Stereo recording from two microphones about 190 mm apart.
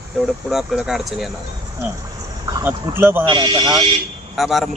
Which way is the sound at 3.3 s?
25° right (ahead or behind).